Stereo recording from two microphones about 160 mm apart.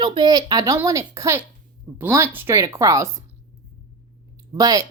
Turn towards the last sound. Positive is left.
turn(degrees=-20)  # may be behind; listen again after turning